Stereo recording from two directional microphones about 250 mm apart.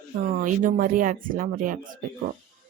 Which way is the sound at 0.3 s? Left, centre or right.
Right.